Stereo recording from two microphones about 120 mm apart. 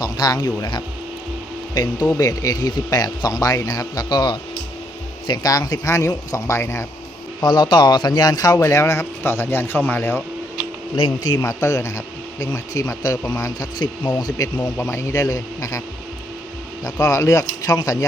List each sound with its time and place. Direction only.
0.0 s speech: 35° left (ahead or behind)
2.0 s speech: 25° left (ahead or behind)
7.4 s speech: 40° left (ahead or behind); by 10.2 s 20° left (ahead or behind)
11.3 s speech: 25° left (ahead or behind)
16.8 s speech: 30° left (ahead or behind)